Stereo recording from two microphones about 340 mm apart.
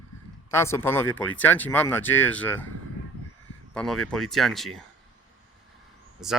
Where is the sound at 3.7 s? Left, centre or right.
Centre.